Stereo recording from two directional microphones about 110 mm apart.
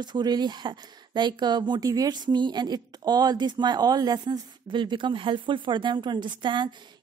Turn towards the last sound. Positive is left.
turn(degrees=-45)  # may be behind; listen again after turning